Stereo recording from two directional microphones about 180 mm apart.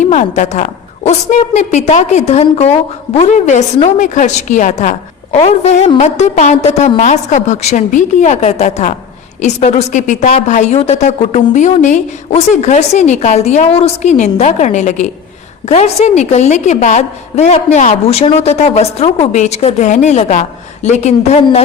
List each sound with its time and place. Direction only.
0.0 s a woman's voice: 40° left (ahead or behind)